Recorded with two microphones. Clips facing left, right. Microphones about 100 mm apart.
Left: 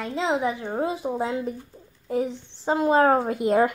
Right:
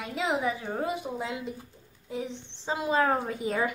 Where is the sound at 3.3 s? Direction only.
65° left (ahead or behind).